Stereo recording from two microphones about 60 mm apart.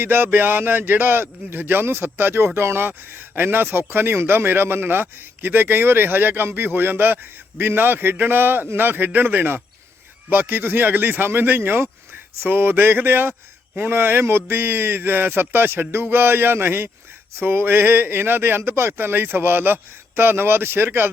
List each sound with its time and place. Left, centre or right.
0.0 s speech: right